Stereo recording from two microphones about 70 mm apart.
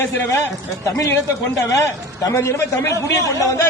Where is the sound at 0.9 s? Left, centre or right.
Left.